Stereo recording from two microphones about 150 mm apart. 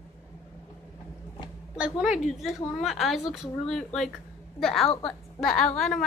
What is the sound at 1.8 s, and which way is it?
A woman's voice, 5° right (ahead or behind).